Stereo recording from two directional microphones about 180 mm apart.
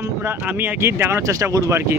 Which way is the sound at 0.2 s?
10° right (ahead or behind).